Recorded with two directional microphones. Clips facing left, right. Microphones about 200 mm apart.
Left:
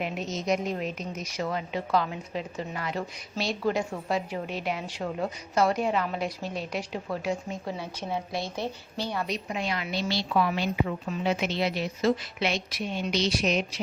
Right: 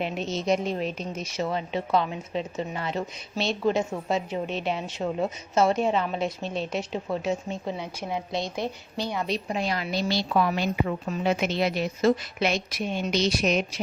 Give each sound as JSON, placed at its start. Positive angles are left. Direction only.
{"t": 0.0, "sound": "a woman's voice", "side_deg": -30}
{"t": 7.9, "sound": "a woman's voice", "side_deg": -10}
{"t": 9.2, "sound": "a woman's voice", "side_deg": -30}